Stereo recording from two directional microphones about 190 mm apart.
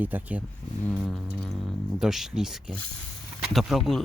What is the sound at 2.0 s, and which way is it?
Speech, centre (ahead or behind).